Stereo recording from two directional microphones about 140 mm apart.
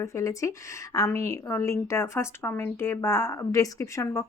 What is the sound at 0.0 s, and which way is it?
A woman's voice, 20° left (ahead or behind).